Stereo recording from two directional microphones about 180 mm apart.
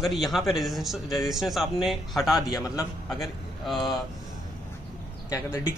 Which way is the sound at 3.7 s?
Centre (ahead or behind).